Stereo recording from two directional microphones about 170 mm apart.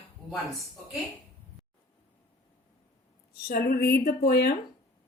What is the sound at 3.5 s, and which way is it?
Speech, 60° left (ahead or behind).